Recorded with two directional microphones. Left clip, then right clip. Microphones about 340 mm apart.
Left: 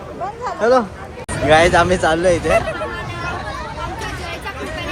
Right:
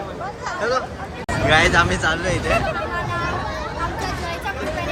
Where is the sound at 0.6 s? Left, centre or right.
Centre.